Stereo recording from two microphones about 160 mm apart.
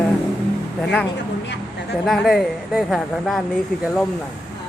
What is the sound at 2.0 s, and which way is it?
Speech, centre (ahead or behind).